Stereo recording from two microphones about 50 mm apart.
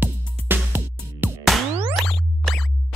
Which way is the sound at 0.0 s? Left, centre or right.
Right.